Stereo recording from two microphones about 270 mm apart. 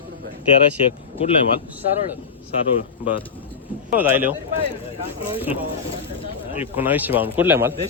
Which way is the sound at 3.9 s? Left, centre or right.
Centre.